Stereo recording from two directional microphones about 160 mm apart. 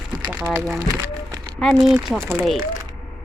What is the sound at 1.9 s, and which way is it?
Speech, centre (ahead or behind).